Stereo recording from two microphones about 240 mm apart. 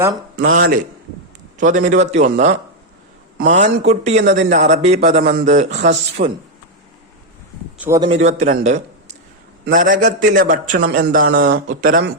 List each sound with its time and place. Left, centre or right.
0.3 s a man's voice: right
5.2 s a man's voice: right
7.8 s a man's voice: centre; by 12.0 s right